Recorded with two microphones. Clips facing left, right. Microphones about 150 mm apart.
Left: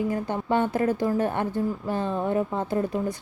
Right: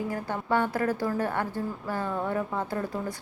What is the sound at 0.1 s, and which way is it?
A woman's voice, 20° left (ahead or behind).